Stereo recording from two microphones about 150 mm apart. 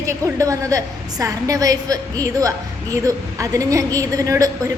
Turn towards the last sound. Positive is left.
turn(degrees=-25)  # may be behind; listen again after turning